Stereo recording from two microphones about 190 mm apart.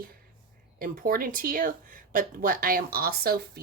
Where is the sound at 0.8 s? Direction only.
50° right (ahead or behind).